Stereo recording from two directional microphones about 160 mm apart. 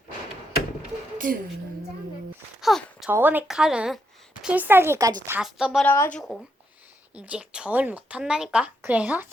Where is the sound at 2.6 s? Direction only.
Centre (ahead or behind).